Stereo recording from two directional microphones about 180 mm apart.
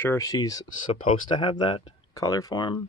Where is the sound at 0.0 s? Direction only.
15° left (ahead or behind).